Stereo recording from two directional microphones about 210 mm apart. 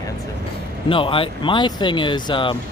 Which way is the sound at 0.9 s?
25° left (ahead or behind).